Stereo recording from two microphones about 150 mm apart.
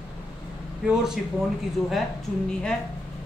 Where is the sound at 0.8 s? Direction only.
5° right (ahead or behind).